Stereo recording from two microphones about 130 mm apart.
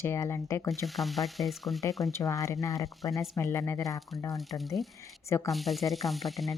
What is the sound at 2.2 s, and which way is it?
Speech, 25° left (ahead or behind).